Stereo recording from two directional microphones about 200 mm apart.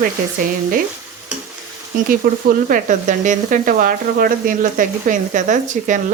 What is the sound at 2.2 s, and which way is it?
Speech, 50° right (ahead or behind).